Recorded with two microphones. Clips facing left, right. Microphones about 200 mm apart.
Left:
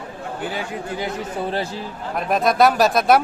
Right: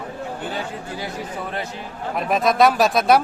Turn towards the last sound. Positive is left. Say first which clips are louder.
# left 1 dB
turn(degrees=0)  # may be behind; listen again after turning